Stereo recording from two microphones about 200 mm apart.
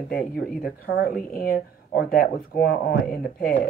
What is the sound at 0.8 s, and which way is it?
Speech, 45° left (ahead or behind).